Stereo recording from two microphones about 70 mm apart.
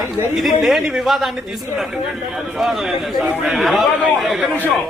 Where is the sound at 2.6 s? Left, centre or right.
Centre.